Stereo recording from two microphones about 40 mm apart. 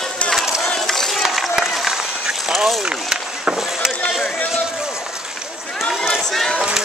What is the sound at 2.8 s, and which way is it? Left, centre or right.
Run, right.